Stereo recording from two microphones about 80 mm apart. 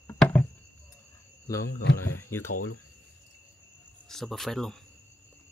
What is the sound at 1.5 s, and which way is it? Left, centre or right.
Speech, left.